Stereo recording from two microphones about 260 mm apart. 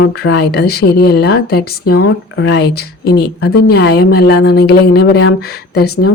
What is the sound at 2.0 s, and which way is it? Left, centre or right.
A woman's voice, left.